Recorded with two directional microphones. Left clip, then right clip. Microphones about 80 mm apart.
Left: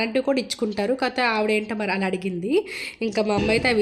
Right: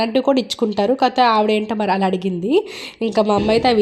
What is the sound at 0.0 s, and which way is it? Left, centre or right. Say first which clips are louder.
A woman's voice: right 6 dB; right.